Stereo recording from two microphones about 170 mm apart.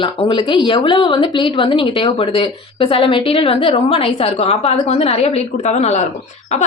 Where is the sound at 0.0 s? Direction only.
30° left (ahead or behind).